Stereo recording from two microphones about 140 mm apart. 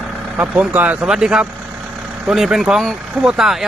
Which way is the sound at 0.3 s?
10° right (ahead or behind).